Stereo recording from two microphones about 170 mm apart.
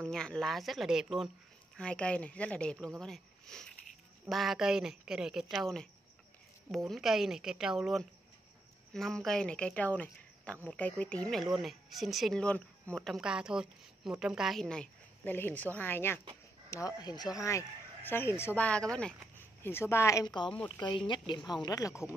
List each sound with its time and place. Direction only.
0.0 s speech: 5° left (ahead or behind); by 20.5 s 25° left (ahead or behind)
21.6 s speech: 20° left (ahead or behind)